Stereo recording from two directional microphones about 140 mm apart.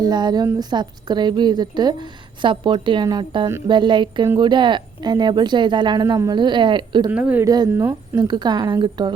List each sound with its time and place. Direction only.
0.0 s a woman's voice: 30° right (ahead or behind)
7.1 s speech: 10° right (ahead or behind)
7.4 s speech: 30° right (ahead or behind)
7.7 s speech: 15° right (ahead or behind)
8.1 s a woman's voice: 30° right (ahead or behind)